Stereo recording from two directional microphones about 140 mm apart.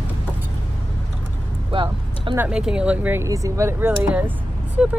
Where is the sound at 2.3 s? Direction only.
15° right (ahead or behind).